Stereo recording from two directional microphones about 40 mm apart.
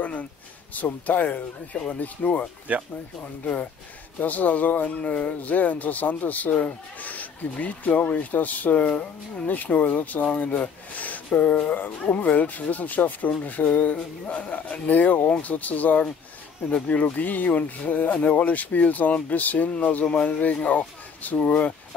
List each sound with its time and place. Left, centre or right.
0.7 s speech: left
2.7 s speech: right
4.2 s speech: left